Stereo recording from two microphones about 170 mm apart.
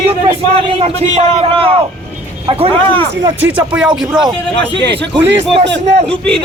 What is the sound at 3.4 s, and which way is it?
Speech, 5° right (ahead or behind).